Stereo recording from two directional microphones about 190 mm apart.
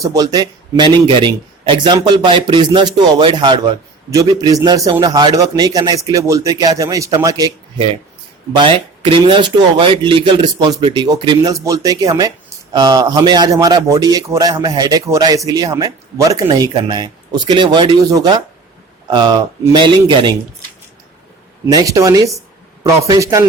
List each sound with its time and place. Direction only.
0.0 s a man's voice: 20° right (ahead or behind)
21.7 s a man's voice: 20° right (ahead or behind)